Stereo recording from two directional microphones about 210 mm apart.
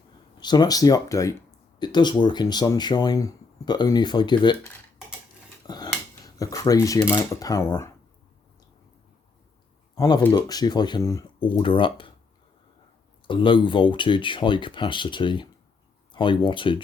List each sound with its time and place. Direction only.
0.3 s speech: 20° left (ahead or behind)
5.6 s a sound: 20° left (ahead or behind)
6.2 s speech: 15° left (ahead or behind)
9.9 s speech: 15° left (ahead or behind)
13.2 s speech: 25° left (ahead or behind)